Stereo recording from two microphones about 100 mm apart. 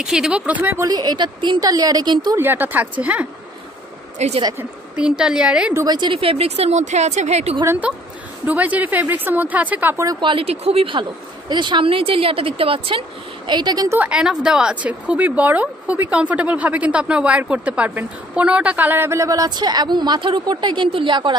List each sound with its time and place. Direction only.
0.0 s a woman's voice: 5° right (ahead or behind)
0.7 s a woman's voice: 40° right (ahead or behind)
1.6 s a woman's voice: 40° right (ahead or behind)
2.3 s speech: 20° right (ahead or behind)
4.2 s speech: 90° right
4.9 s a woman's voice: 10° right (ahead or behind)
5.9 s a woman's voice: 50° right (ahead or behind)
6.1 s speech: 75° right (ahead or behind)
8.5 s a woman's voice: 15° right (ahead or behind)
10.2 s speech: 70° right (ahead or behind)
13.5 s a woman's voice: 45° right (ahead or behind)
13.9 s a woman's voice: 15° right (ahead or behind)
19.0 s a woman's voice: 30° right (ahead or behind); by 21.4 s 50° right (ahead or behind)